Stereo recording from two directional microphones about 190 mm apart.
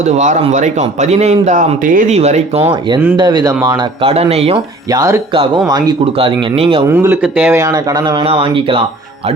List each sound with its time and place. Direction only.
0.0 s speech: 40° right (ahead or behind); by 4.1 s 20° right (ahead or behind)
4.1 s speech: 30° right (ahead or behind)
6.8 s speech: 10° right (ahead or behind); by 8.8 s 30° right (ahead or behind)